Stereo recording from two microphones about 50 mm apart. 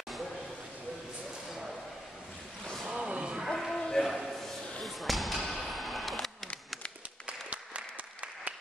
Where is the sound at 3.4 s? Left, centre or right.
Centre.